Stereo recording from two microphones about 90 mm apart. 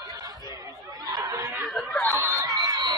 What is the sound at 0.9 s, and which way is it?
Snicker, 45° right (ahead or behind).